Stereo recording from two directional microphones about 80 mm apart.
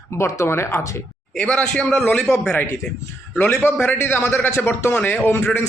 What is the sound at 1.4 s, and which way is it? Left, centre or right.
Speech, centre.